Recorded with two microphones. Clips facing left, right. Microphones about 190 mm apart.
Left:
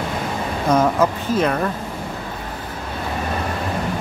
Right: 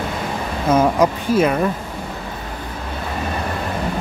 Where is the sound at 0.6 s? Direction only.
10° right (ahead or behind).